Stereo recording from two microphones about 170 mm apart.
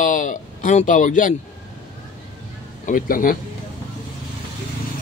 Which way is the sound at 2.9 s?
55° left (ahead or behind).